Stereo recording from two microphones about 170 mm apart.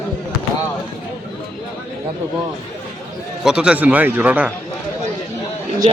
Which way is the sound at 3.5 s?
5° right (ahead or behind).